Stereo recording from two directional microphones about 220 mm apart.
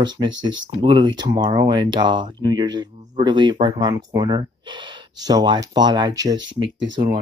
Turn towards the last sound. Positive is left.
turn(degrees=-20)  # may be behind; listen again after turning